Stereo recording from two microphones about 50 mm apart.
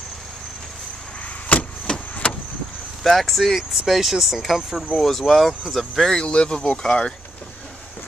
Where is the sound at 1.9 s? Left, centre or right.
Centre.